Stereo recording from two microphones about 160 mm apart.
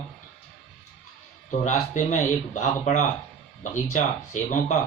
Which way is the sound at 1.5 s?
50° left (ahead or behind).